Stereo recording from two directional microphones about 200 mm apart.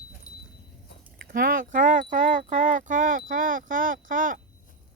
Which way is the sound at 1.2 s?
45° right (ahead or behind).